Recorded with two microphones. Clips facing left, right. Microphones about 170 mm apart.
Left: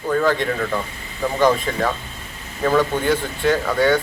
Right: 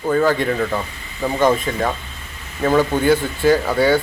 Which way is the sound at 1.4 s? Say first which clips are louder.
Right 1 dB; 25° right (ahead or behind).